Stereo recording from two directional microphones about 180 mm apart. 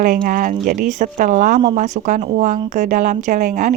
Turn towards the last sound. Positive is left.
turn(degrees=-45)  # may be behind; listen again after turning